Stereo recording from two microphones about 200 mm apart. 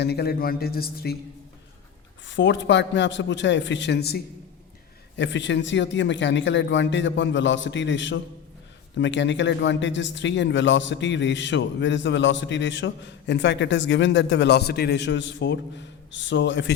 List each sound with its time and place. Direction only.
0.0 s a man's voice: 50° left (ahead or behind)
2.2 s speech: 65° left (ahead or behind)